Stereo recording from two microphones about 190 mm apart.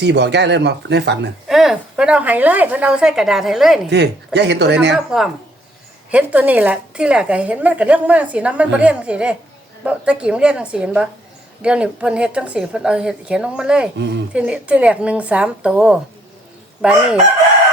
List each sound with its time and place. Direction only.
0.0 s speech: 65° right (ahead or behind)
1.5 s a woman's voice: centre (ahead or behind)
3.8 s speech: 65° right (ahead or behind)
6.1 s a woman's voice: 5° right (ahead or behind)
14.0 s speech: 65° right (ahead or behind)
14.3 s a woman's voice: 5° right (ahead or behind)